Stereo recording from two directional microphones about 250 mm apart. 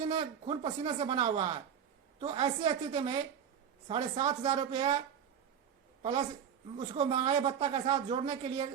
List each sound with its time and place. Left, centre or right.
0.0 s speech: right
6.0 s a woman's voice: centre